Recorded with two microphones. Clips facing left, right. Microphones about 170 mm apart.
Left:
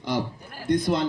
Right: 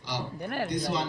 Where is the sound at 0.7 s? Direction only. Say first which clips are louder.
Left 11 dB; 55° left (ahead or behind).